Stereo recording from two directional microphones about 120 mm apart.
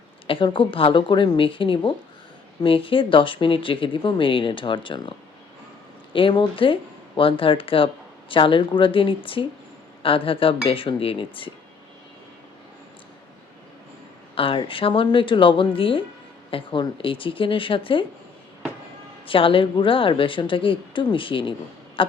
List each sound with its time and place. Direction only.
0.3 s speech: 45° left (ahead or behind)
6.1 s speech: 45° left (ahead or behind)
14.3 s speech: 50° left (ahead or behind)
19.2 s speech: 45° left (ahead or behind)
22.0 s a sound: 45° left (ahead or behind)